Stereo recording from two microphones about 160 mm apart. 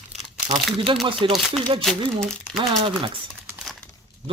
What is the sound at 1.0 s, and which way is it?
Speech, 35° right (ahead or behind).